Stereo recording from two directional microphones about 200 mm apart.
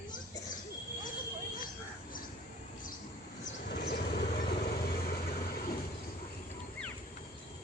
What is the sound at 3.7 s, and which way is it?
Vehicle, 55° left (ahead or behind).